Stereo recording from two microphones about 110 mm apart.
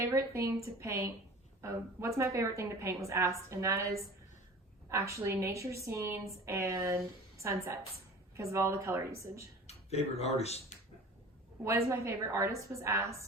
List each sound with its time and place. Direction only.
0.0 s a woman's voice: 25° right (ahead or behind)
9.6 s speech: 75° left (ahead or behind)
11.6 s a woman's voice: 25° right (ahead or behind)